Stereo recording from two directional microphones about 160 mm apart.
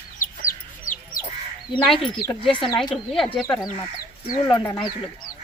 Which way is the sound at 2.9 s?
Centre (ahead or behind).